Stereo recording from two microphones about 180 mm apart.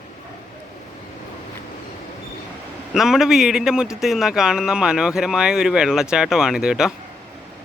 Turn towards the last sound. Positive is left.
turn(degrees=-5)  # may be behind; listen again after turning